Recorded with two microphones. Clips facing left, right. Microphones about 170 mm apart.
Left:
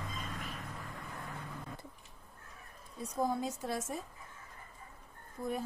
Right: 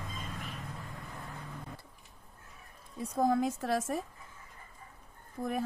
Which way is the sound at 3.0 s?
90° right.